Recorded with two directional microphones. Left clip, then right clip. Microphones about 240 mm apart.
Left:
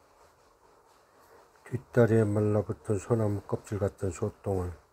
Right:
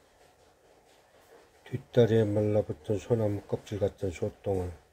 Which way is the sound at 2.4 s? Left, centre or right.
Centre.